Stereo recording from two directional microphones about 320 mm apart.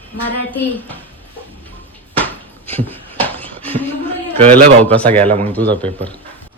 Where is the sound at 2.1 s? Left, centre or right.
Centre.